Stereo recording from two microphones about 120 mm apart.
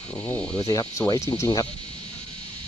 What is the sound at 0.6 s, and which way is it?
Speech, 25° left (ahead or behind).